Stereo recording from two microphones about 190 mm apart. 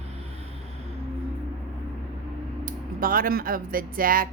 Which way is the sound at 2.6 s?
50° right (ahead or behind).